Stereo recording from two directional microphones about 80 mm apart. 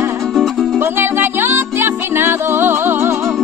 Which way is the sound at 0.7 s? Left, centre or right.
Right.